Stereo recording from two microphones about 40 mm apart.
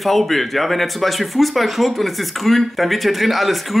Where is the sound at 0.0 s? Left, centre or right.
Centre.